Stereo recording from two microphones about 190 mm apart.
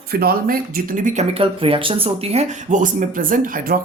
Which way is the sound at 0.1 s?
50° right (ahead or behind).